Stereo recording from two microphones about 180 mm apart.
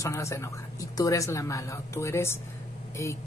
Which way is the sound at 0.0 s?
15° left (ahead or behind).